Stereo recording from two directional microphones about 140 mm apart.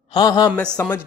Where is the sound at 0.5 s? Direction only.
5° left (ahead or behind).